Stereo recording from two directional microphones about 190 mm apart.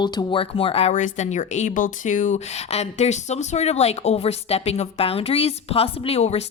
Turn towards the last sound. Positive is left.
turn(degrees=30)  # may be behind; listen again after turning